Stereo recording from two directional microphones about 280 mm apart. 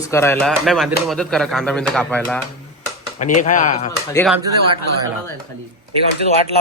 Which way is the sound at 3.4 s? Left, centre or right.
Left.